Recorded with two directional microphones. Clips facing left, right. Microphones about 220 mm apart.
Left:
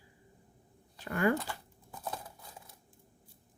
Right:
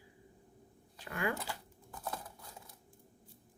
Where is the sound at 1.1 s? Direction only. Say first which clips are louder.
Left 7 dB; 45° left (ahead or behind).